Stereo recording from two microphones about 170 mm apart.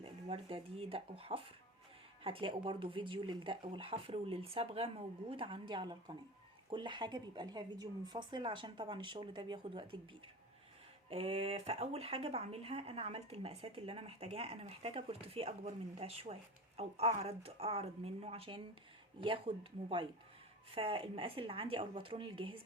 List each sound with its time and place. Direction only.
0.0 s speech: 35° right (ahead or behind)
11.1 s speech: 35° right (ahead or behind)